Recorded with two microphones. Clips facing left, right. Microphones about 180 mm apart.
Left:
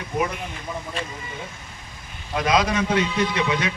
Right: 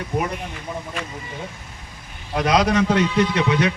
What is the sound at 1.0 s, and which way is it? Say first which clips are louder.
Speech: even; 30° left (ahead or behind).